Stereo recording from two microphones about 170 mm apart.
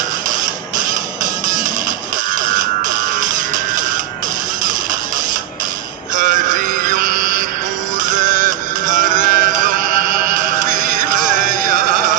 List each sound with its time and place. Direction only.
0.7 s music: 50° right (ahead or behind)
6.1 s music: 50° right (ahead or behind)